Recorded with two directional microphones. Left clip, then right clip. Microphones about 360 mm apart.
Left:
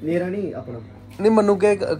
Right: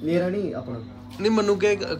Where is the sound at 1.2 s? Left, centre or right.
Centre.